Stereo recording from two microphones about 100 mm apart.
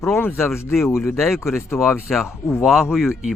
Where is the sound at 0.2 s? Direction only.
20° left (ahead or behind).